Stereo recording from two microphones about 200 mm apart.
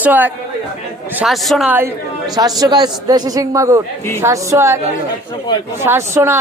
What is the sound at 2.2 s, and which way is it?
A man's voice, 20° right (ahead or behind).